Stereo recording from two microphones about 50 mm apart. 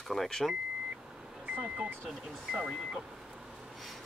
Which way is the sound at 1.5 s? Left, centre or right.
Right.